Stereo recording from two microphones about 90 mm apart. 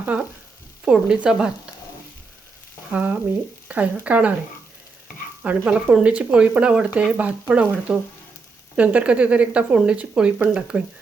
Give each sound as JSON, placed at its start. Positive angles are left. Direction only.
{"t": 0.0, "sound": "speech", "side_deg": -15}
{"t": 2.9, "sound": "speech", "side_deg": -15}
{"t": 5.4, "sound": "speech", "side_deg": -10}